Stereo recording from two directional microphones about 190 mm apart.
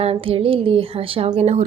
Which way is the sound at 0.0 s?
30° right (ahead or behind).